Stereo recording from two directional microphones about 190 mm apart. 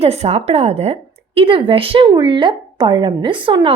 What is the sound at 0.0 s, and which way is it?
A woman's voice, 35° right (ahead or behind).